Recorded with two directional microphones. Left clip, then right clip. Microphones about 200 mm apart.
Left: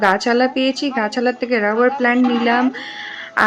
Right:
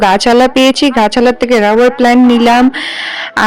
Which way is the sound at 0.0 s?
50° right (ahead or behind).